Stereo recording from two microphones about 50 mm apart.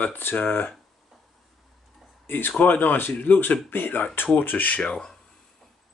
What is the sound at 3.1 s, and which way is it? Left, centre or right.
Speech, left.